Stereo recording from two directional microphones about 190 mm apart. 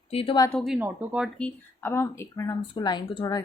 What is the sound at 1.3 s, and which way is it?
Speech, 10° left (ahead or behind).